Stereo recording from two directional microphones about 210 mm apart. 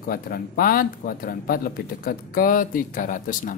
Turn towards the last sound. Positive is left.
turn(degrees=40)  # may be behind; listen again after turning